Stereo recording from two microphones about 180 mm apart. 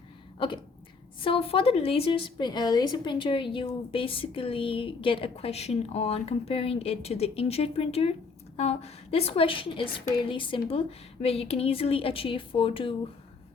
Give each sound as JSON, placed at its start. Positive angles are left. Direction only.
{"t": 0.3, "sound": "a woman's voice", "side_deg": 30}